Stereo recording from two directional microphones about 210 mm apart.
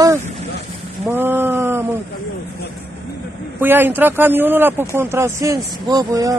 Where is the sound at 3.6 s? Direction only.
10° right (ahead or behind).